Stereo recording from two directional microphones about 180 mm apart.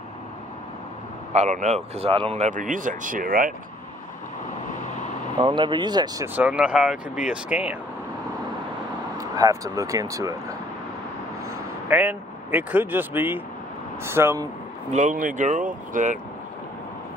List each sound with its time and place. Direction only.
1.3 s speech: 40° right (ahead or behind)
5.4 s speech: 25° right (ahead or behind)
6.2 s speech: 10° right (ahead or behind)
9.2 s speech: 20° right (ahead or behind)
11.4 s speech: 10° right (ahead or behind)
14.9 s speech: 45° right (ahead or behind)